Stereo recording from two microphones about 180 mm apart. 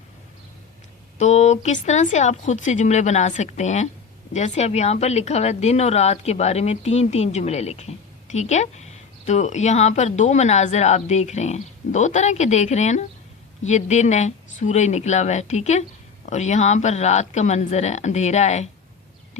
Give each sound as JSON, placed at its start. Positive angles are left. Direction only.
{"t": 1.2, "sound": "a woman's voice", "side_deg": 40}